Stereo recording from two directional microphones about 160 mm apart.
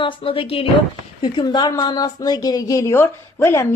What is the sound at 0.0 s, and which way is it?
Speech, 35° left (ahead or behind).